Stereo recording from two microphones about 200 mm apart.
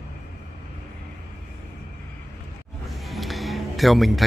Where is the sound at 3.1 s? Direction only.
Centre (ahead or behind).